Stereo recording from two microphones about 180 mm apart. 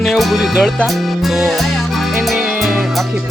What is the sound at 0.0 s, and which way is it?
Music, centre (ahead or behind).